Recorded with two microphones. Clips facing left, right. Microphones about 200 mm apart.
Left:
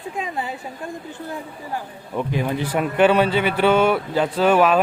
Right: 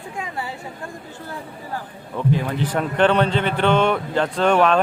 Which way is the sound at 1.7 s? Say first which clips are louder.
Left 3 dB; 15° left (ahead or behind).